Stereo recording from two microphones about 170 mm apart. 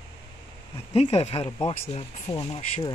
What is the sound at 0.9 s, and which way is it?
Speech, 35° left (ahead or behind).